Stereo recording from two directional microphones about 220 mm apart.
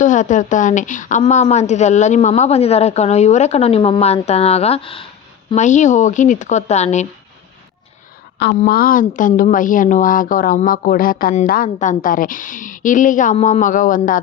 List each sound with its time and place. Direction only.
0.0 s a woman's voice: 35° left (ahead or behind)
8.4 s a woman's voice: 45° left (ahead or behind)